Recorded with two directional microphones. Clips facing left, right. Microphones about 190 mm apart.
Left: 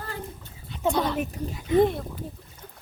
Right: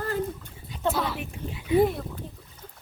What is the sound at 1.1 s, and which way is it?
Speech, 40° left (ahead or behind).